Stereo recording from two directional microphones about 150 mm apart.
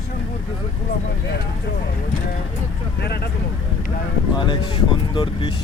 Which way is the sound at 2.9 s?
90° left.